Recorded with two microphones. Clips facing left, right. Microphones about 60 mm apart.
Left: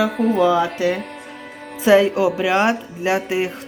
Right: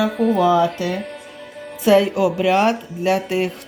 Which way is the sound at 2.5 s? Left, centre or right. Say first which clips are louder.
Right 1 dB; centre.